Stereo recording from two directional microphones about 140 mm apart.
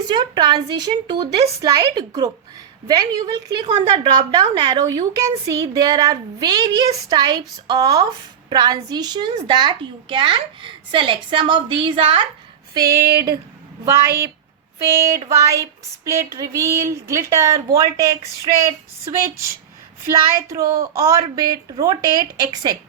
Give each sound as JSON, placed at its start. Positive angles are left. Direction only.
{"t": 0.1, "sound": "a woman's voice", "side_deg": -30}
{"t": 12.8, "sound": "speech", "side_deg": -90}
{"t": 14.8, "sound": "a woman's voice", "side_deg": -20}